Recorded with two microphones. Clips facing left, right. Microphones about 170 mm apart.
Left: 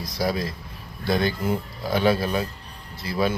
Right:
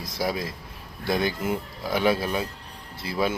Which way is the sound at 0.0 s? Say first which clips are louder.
Left 2 dB; 20° right (ahead or behind).